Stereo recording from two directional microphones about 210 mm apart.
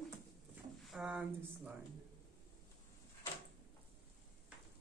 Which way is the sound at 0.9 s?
5° right (ahead or behind).